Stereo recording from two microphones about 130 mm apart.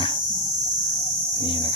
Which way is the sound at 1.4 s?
40° left (ahead or behind).